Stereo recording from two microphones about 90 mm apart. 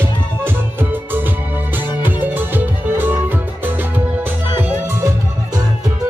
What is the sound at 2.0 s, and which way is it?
Music, 20° right (ahead or behind).